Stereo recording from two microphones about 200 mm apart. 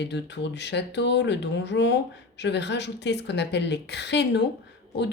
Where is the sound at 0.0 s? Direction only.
60° left (ahead or behind).